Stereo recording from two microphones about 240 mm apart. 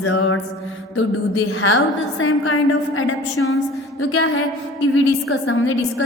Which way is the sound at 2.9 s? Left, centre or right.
Left.